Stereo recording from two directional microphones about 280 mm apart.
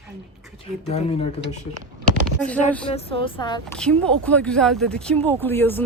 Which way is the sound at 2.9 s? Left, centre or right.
Centre.